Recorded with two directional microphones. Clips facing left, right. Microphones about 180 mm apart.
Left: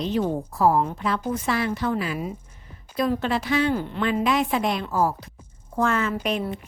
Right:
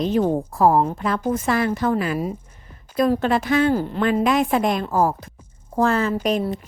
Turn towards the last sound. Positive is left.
turn(degrees=-40)  # may be behind; listen again after turning